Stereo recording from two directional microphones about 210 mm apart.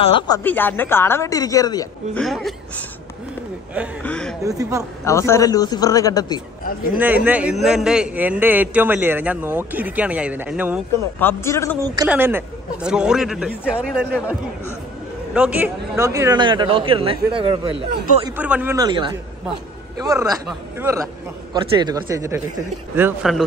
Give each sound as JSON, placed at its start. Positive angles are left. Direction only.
{"t": 0.0, "sound": "a woman's voice", "side_deg": 25}
{"t": 0.4, "sound": "speech", "side_deg": 10}
{"t": 2.1, "sound": "speech", "side_deg": 0}
{"t": 4.0, "sound": "speech", "side_deg": 5}
{"t": 4.5, "sound": "a man's voice", "side_deg": -15}
{"t": 5.0, "sound": "speech", "side_deg": 15}
{"t": 7.0, "sound": "a man's voice", "side_deg": -10}
{"t": 11.1, "sound": "speech", "side_deg": 10}
{"t": 12.1, "sound": "speech", "side_deg": -10}
{"t": 15.3, "sound": "speech", "side_deg": -5}
{"t": 18.2, "sound": "a man's voice", "side_deg": -10}
{"t": 21.5, "sound": "a man's voice", "side_deg": -20}